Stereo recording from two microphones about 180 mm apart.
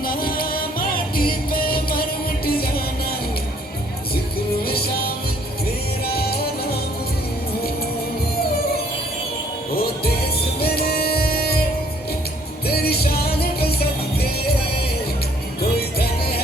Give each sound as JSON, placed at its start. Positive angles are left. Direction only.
{"t": 0.0, "sound": "music", "side_deg": 55}
{"t": 4.6, "sound": "music", "side_deg": 55}
{"t": 6.1, "sound": "music", "side_deg": 60}
{"t": 10.6, "sound": "music", "side_deg": 60}
{"t": 12.6, "sound": "music", "side_deg": 60}
{"t": 15.7, "sound": "music", "side_deg": 60}